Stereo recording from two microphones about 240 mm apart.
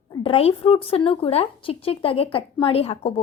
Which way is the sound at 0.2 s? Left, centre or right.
Left.